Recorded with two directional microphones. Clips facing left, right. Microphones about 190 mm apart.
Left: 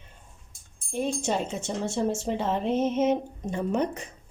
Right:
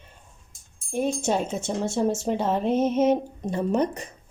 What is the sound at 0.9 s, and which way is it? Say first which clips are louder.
Speech: right 3 dB; 50° right (ahead or behind).